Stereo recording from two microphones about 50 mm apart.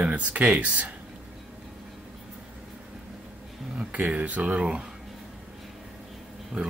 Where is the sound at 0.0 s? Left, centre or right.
Right.